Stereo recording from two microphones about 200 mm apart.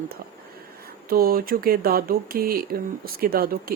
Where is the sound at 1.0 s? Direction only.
50° right (ahead or behind).